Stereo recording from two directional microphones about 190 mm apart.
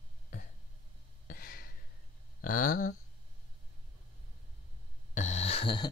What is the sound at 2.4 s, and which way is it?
Speech, 45° left (ahead or behind).